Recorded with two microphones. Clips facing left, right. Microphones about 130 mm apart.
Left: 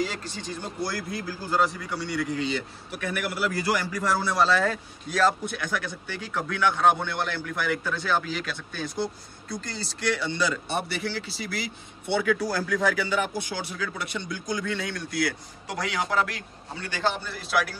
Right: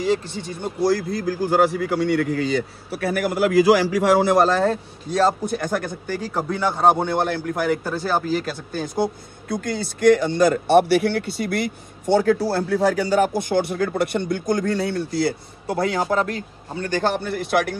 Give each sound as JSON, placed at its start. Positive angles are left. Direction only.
{"t": 1.2, "sound": "a man's voice", "side_deg": -65}
{"t": 2.4, "sound": "a man's voice", "side_deg": -40}
{"t": 3.5, "sound": "a man's voice", "side_deg": -90}
{"t": 4.4, "sound": "a man's voice", "side_deg": -45}
{"t": 4.6, "sound": "a man's voice", "side_deg": -30}
{"t": 5.6, "sound": "a man's voice", "side_deg": -50}
{"t": 12.1, "sound": "speech", "side_deg": -35}